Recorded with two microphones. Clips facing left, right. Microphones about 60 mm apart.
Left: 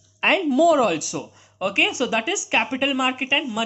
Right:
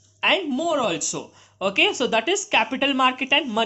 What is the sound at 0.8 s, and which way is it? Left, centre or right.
Speech, left.